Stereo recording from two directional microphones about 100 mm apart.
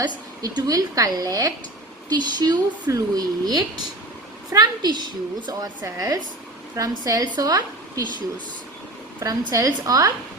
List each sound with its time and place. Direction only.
0.4 s a child's voice: 35° right (ahead or behind)
9.2 s speech: 40° right (ahead or behind)